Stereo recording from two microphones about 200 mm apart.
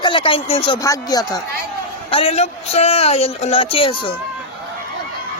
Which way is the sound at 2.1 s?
30° left (ahead or behind).